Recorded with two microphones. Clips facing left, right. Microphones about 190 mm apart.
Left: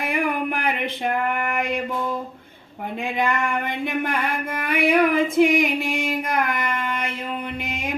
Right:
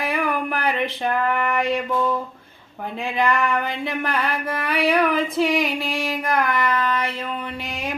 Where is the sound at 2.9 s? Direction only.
20° left (ahead or behind).